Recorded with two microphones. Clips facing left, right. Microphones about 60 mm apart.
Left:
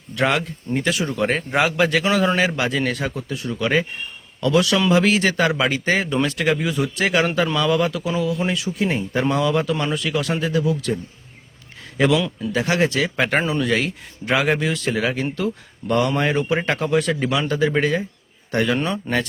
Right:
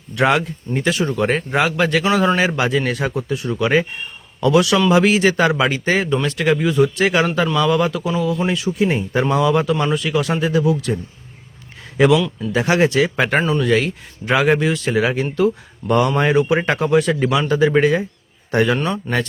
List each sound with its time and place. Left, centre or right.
0.2 s speech: centre
2.1 s a man's voice: centre
4.9 s speech: centre
12.5 s speech: right
13.1 s speech: centre
13.4 s speech: centre
17.5 s speech: centre
18.8 s speech: centre